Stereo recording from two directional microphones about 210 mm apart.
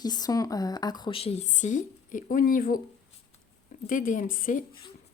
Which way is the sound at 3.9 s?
40° left (ahead or behind).